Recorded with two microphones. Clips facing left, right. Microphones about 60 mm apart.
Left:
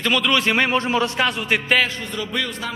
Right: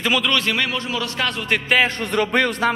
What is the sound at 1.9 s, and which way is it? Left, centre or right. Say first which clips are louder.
Speech: right 7 dB; right.